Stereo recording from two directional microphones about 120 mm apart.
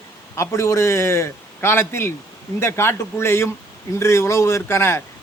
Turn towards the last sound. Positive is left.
turn(degrees=20)  # may be behind; listen again after turning